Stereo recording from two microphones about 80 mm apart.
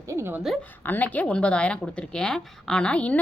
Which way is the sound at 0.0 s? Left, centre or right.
Right.